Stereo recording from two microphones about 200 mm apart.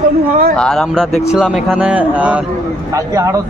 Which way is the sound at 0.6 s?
5° left (ahead or behind).